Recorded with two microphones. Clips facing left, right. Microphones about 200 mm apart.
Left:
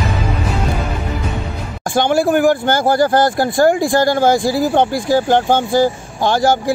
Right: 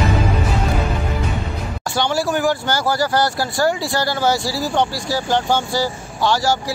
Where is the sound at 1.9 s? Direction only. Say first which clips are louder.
Left 6 dB; 50° left (ahead or behind).